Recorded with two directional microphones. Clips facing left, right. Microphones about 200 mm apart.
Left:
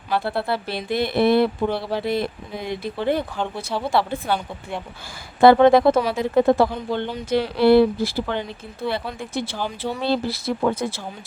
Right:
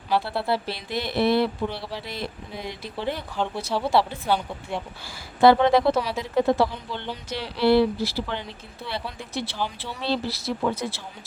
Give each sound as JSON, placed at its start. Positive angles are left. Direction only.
{"t": 0.1, "sound": "speech", "side_deg": 55}
{"t": 5.4, "sound": "speech", "side_deg": 50}